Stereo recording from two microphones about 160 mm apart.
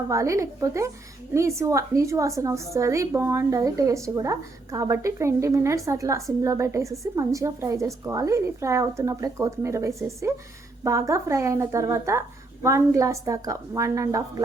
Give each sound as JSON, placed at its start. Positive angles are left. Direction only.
{"t": 0.1, "sound": "a woman's voice", "side_deg": -20}